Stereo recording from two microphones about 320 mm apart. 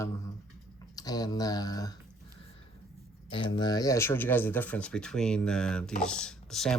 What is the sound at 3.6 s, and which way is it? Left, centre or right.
Speech, centre.